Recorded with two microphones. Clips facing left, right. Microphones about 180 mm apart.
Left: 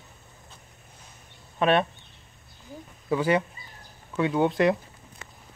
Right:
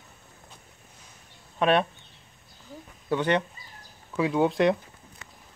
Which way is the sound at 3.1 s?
5° left (ahead or behind).